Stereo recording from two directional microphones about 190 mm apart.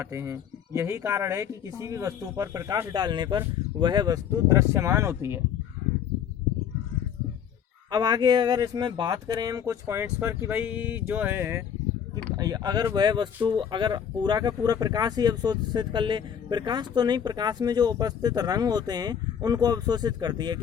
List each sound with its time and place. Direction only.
0.0 s speech: 15° right (ahead or behind)
7.9 s speech: 20° right (ahead or behind)